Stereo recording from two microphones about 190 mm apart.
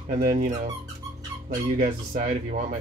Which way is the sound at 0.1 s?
50° right (ahead or behind).